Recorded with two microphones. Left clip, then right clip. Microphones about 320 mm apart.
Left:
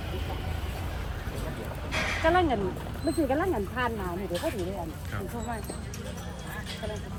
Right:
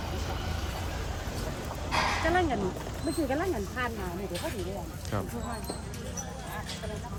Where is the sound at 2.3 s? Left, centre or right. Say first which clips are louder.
Left 3 dB; centre.